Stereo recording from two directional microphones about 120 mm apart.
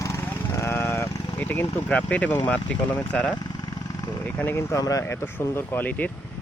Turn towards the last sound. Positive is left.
turn(degrees=15)  # may be behind; listen again after turning